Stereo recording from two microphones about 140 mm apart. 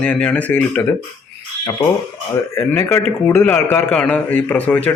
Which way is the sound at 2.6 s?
20° left (ahead or behind).